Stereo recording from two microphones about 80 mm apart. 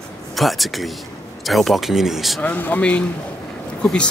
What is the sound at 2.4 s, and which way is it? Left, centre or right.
Speech, left.